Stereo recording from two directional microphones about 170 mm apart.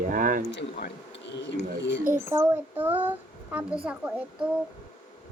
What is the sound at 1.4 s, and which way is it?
Speech, 90° left.